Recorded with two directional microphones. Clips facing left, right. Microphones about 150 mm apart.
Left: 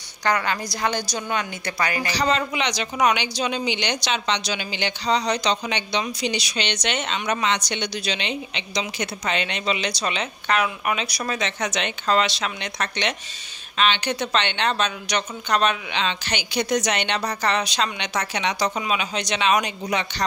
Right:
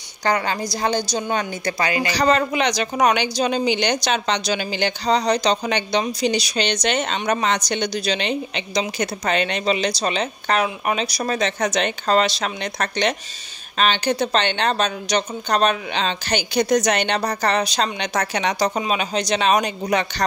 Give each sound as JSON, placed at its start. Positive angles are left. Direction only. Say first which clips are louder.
{"t": 0.2, "sound": "a woman's voice", "louder": "right 2 dB", "side_deg": -30}
{"t": 2.1, "sound": "a woman's voice", "louder": "right 5 dB", "side_deg": -50}